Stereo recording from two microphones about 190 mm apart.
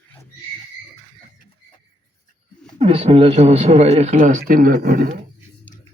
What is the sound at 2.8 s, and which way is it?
Speech, 30° right (ahead or behind).